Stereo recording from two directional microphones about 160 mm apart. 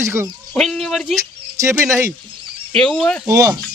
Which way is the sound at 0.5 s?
Centre (ahead or behind).